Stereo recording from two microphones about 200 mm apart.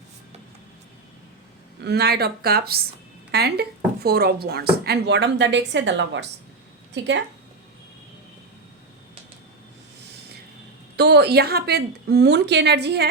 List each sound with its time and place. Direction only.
1.8 s a woman's voice: 55° right (ahead or behind)
10.9 s a woman's voice: 55° right (ahead or behind)